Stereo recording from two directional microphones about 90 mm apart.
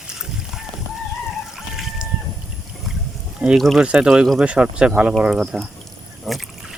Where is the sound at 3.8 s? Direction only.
10° right (ahead or behind).